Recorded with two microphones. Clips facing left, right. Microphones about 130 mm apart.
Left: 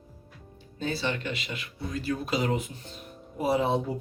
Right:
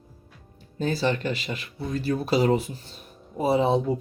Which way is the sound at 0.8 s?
40° right (ahead or behind).